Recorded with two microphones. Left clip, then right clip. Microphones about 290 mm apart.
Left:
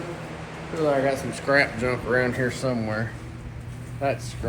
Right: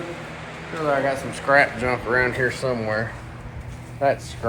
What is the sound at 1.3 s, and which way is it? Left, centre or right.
Speech, centre.